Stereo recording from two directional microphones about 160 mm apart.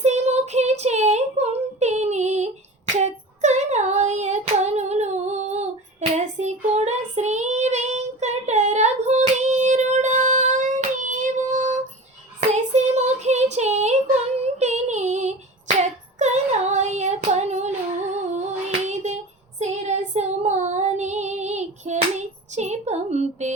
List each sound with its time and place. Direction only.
0.0 s a sound: 45° right (ahead or behind)
2.9 s child singing: 45° right (ahead or behind)
14.3 s female singing: 45° right (ahead or behind)
16.1 s child singing: 45° right (ahead or behind)